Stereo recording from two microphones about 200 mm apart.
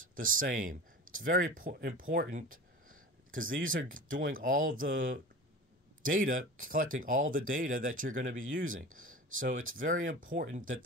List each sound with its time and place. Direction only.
0.0 s speech: 45° right (ahead or behind)